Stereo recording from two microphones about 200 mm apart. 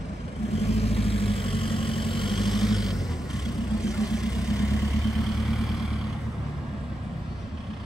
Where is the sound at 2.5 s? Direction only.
Centre (ahead or behind).